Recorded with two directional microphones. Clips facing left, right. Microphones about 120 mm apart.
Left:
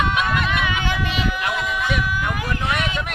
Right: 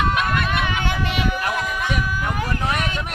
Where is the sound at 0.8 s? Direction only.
55° right (ahead or behind).